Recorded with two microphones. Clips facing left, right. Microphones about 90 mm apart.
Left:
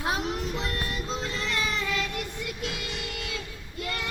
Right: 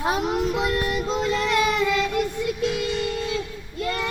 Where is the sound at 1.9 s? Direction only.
90° right.